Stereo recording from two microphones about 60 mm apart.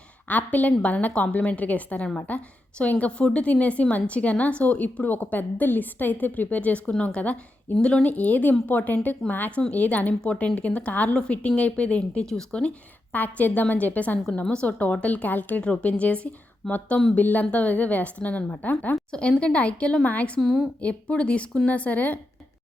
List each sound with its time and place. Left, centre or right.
0.3 s a woman's voice: left
12.2 s speech: centre
13.1 s a woman's voice: left
14.4 s speech: centre
14.7 s a woman's voice: left
19.1 s a woman's voice: centre
20.4 s a woman's voice: centre
20.8 s a woman's voice: left